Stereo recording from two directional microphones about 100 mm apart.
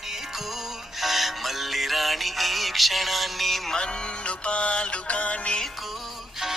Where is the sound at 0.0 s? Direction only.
Centre (ahead or behind).